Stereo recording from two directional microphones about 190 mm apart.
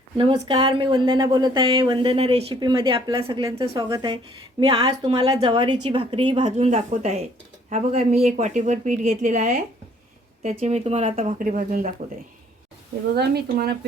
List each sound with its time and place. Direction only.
0.2 s speech: 25° right (ahead or behind); by 11.9 s 40° right (ahead or behind)
13.1 s speech: 55° right (ahead or behind)